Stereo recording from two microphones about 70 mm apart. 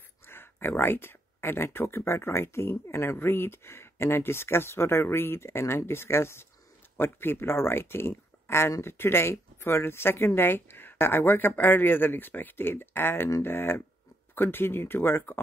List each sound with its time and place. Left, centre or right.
0.3 s speech: left